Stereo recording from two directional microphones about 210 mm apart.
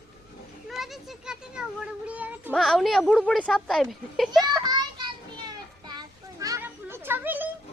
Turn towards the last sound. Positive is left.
turn(degrees=-10)  # may be behind; listen again after turning